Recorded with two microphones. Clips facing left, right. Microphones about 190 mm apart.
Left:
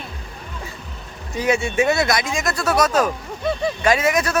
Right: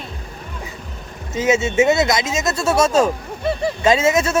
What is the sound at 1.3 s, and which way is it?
Speech, 20° right (ahead or behind).